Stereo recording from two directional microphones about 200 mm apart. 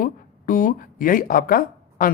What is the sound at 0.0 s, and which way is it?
Speech, 45° left (ahead or behind).